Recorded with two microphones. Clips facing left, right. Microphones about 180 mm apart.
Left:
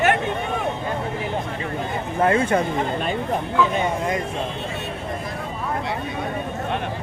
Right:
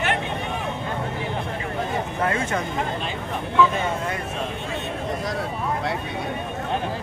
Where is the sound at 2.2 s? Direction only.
30° left (ahead or behind).